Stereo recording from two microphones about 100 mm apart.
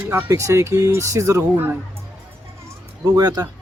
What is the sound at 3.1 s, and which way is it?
Speech, 40° right (ahead or behind).